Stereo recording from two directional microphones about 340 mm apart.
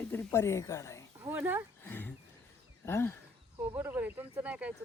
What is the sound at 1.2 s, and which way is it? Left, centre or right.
Speech, centre.